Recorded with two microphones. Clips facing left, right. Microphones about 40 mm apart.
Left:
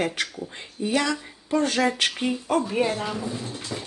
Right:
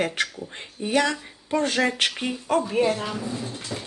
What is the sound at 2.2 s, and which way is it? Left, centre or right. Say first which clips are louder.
Speech: even; centre.